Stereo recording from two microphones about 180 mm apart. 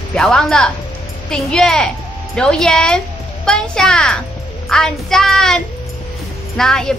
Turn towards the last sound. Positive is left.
turn(degrees=5)  # may be behind; listen again after turning